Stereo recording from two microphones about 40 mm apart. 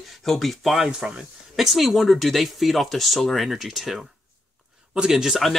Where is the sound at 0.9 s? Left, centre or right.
Right.